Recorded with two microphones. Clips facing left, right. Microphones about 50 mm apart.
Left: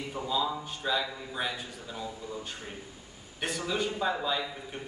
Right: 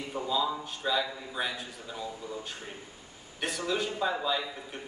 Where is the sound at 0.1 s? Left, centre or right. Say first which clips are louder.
Right 1 dB; centre.